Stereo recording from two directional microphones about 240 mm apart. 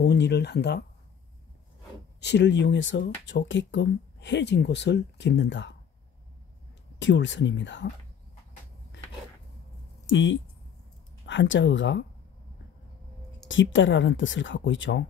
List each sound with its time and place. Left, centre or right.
0.0 s speech: left
2.1 s speech: left
7.0 s speech: left
10.0 s speech: left
13.5 s speech: left